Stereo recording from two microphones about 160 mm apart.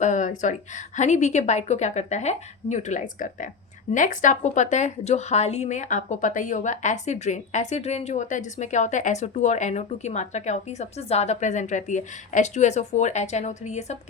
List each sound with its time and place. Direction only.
0.0 s speech: 50° left (ahead or behind)